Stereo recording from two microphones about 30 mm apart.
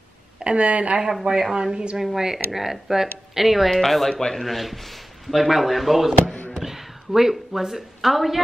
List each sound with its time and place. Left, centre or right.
0.4 s a woman's voice: right
1.5 s a woman's voice: right
2.0 s speech: centre
3.7 s speech: centre
4.1 s a man's voice: left
4.4 s a woman's voice: centre